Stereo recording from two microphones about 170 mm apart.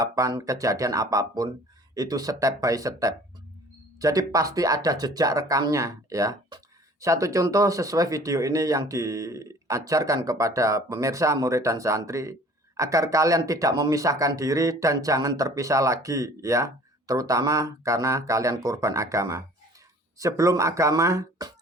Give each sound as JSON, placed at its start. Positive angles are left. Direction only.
{"t": 0.0, "sound": "speech", "side_deg": -20}